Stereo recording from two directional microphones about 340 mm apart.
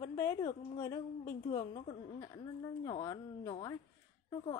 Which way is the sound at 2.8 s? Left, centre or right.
Centre.